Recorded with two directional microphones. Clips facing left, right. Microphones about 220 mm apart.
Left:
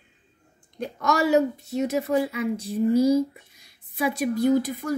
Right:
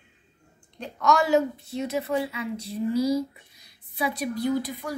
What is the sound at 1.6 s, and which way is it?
A woman's voice, 45° left (ahead or behind).